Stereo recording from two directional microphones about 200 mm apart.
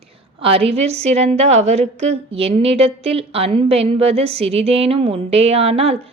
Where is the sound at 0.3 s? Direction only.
30° right (ahead or behind).